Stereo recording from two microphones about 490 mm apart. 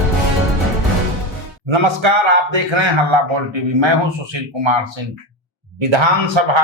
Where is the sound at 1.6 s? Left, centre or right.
Right.